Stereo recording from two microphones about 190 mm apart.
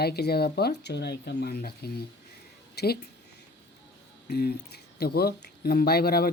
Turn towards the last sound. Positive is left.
turn(degrees=55)  # may be behind; listen again after turning